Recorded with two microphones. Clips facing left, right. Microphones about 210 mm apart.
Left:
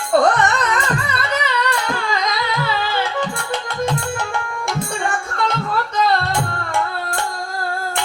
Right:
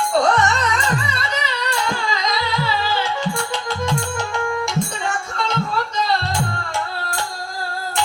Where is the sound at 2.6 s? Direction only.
55° left (ahead or behind).